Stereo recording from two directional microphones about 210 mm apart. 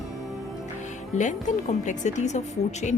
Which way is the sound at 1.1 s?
35° left (ahead or behind).